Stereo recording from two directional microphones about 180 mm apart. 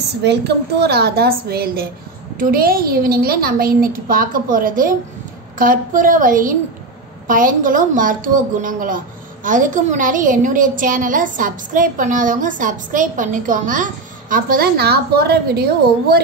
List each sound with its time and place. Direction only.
0.2 s a woman's voice: 70° right (ahead or behind)